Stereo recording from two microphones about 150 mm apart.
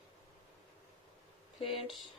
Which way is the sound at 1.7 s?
Centre (ahead or behind).